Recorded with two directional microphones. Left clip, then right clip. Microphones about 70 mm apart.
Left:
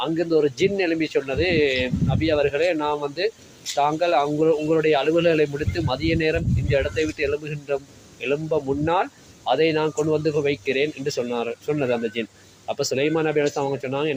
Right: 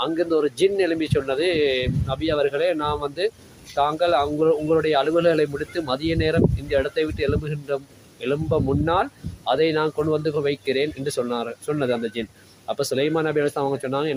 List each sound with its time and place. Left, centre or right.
0.1 s speech: right